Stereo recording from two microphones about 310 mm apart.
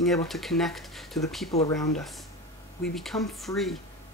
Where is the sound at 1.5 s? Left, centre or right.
Centre.